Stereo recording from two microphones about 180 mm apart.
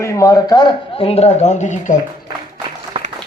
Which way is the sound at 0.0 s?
15° left (ahead or behind).